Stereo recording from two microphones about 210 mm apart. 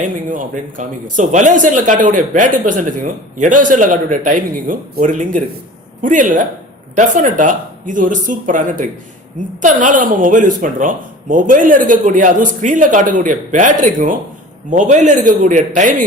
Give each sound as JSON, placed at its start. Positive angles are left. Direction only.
{"t": 0.0, "sound": "a man's voice", "side_deg": -40}